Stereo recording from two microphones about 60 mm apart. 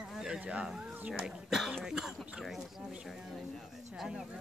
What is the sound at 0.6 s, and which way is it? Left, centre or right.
Speech, centre.